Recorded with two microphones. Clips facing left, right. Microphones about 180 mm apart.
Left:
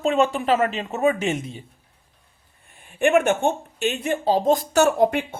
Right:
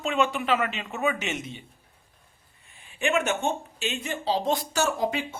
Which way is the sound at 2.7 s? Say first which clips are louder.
Left 8 dB; 55° left (ahead or behind).